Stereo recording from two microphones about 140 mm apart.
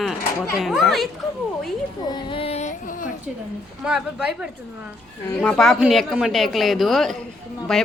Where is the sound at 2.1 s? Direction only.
40° left (ahead or behind); by 3.1 s 55° left (ahead or behind).